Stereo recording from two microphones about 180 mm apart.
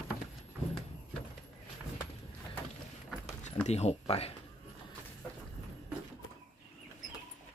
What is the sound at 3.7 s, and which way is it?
Speech, 35° left (ahead or behind).